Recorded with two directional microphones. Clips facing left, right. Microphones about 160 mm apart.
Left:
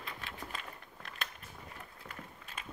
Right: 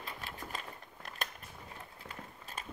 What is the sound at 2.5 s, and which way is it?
Walk, 40° right (ahead or behind).